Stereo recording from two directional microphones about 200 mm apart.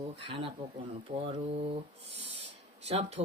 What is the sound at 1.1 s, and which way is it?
Speech, 30° right (ahead or behind).